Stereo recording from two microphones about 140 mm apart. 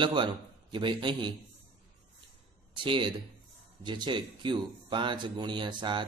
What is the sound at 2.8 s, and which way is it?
Speech, 35° right (ahead or behind).